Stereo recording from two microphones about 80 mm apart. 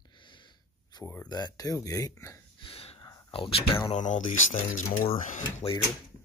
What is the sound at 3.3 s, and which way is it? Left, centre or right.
Speech, left.